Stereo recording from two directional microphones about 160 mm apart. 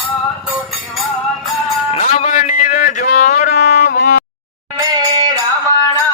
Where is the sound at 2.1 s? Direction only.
50° left (ahead or behind).